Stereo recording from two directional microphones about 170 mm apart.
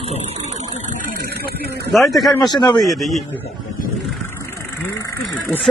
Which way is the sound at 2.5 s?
25° left (ahead or behind).